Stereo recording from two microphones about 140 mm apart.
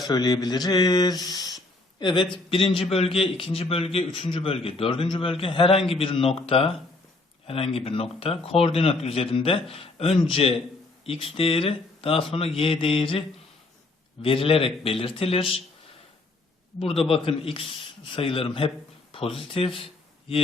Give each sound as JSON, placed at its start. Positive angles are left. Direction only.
{"t": 0.1, "sound": "a man's voice", "side_deg": 30}
{"t": 16.8, "sound": "a man's voice", "side_deg": 45}